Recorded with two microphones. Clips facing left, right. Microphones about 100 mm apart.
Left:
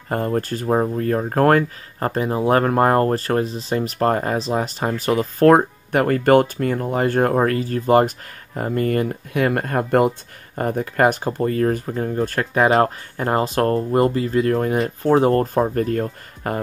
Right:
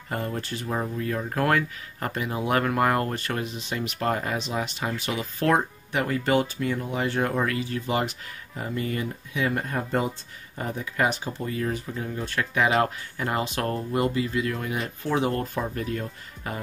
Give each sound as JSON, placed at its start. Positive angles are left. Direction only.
{"t": 0.1, "sound": "speech", "side_deg": 45}